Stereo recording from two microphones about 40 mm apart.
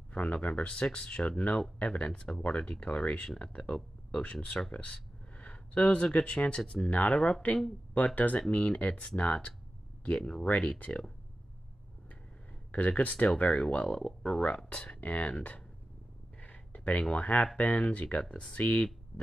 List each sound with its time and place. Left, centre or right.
0.1 s speech: left
5.4 s a sound: left
6.1 s speech: left
10.4 s speech: left
12.7 s speech: left
15.0 s speech: left
16.3 s a sound: left
17.1 s speech: left